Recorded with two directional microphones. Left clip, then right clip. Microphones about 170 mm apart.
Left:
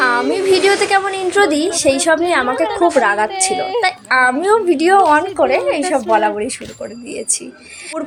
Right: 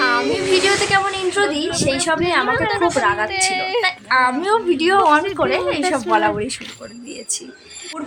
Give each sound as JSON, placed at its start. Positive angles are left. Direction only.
{"t": 0.3, "sound": "a child's voice", "side_deg": 25}